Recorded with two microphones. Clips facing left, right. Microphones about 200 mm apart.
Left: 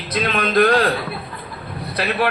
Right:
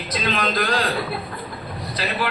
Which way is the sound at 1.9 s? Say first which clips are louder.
Left 5 dB; 60° left (ahead or behind).